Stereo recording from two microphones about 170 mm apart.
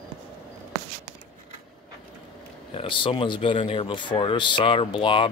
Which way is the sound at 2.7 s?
30° left (ahead or behind).